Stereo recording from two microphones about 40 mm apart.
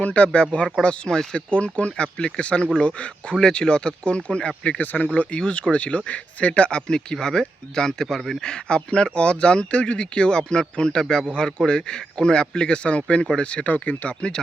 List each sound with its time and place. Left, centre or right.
0.0 s speech: left; by 1.4 s centre
1.5 s speech: left
3.3 s speech: centre
4.8 s speech: left
13.7 s speech: left
14.1 s speech: left